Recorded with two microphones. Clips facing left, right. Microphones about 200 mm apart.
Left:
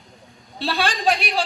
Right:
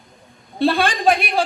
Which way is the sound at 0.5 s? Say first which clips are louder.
Right 6 dB; 55° right (ahead or behind).